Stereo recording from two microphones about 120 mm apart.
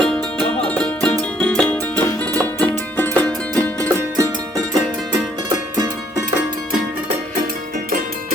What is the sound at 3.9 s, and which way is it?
Music, 30° right (ahead or behind).